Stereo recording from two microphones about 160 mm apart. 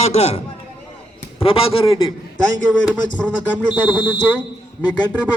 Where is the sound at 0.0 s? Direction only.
40° left (ahead or behind).